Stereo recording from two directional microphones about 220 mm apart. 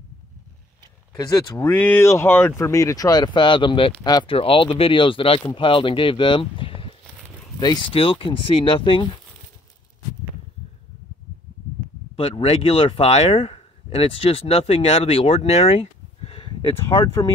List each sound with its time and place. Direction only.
1.1 s speech: 10° left (ahead or behind)
12.2 s speech: 25° left (ahead or behind)